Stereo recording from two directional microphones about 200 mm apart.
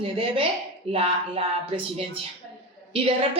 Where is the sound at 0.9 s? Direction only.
30° right (ahead or behind).